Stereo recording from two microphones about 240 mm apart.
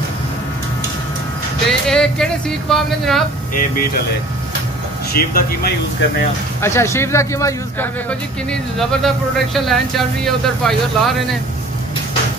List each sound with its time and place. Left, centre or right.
1.7 s speech: centre
3.5 s speech: left
5.1 s speech: left
6.6 s speech: centre